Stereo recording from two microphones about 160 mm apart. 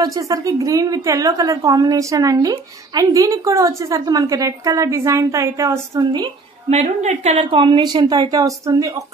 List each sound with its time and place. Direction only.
0.0 s a woman's voice: 20° right (ahead or behind)
6.7 s a woman's voice: 45° right (ahead or behind); by 9.0 s 20° right (ahead or behind)